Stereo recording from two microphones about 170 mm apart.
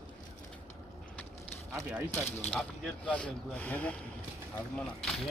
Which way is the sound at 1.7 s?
15° right (ahead or behind).